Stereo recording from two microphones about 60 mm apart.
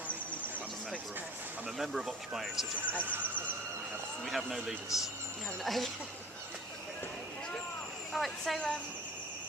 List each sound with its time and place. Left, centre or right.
1.8 s speech: centre
3.0 s speech: right
4.3 s speech: centre
8.1 s speech: centre
8.5 s speech: centre